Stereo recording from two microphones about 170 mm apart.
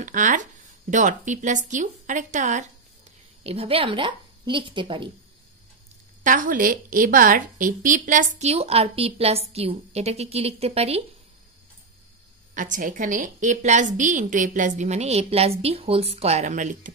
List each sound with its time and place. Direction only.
0.0 s a woman's voice: 50° right (ahead or behind)
3.4 s a woman's voice: 35° right (ahead or behind)
6.2 s a woman's voice: 50° right (ahead or behind)
12.5 s a woman's voice: 50° right (ahead or behind)